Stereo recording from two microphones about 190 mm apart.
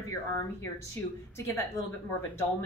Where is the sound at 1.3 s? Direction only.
15° left (ahead or behind).